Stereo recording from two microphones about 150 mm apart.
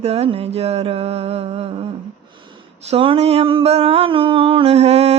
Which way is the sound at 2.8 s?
40° right (ahead or behind).